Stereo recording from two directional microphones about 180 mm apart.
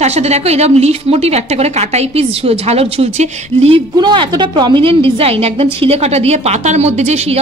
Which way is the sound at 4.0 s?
25° right (ahead or behind).